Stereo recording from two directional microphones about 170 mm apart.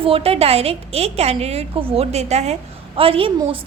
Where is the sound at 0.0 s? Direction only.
35° right (ahead or behind).